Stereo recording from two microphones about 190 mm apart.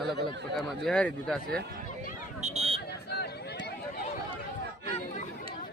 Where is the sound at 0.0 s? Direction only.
60° right (ahead or behind).